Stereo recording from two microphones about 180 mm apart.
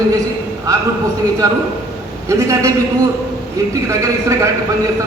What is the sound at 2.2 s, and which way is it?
A man's voice, 15° right (ahead or behind).